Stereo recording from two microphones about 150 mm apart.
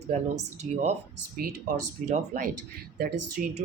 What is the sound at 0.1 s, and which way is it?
Speech, 45° right (ahead or behind).